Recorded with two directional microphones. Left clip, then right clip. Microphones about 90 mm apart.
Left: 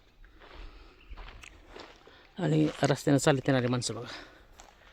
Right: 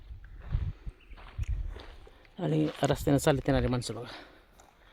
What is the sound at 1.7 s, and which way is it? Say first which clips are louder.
Walk: left 3 dB; 30° left (ahead or behind).